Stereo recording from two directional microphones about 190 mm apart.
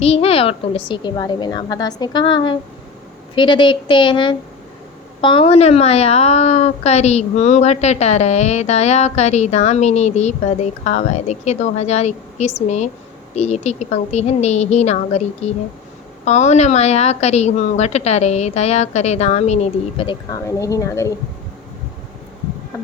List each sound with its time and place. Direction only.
0.0 s a woman's voice: 30° left (ahead or behind)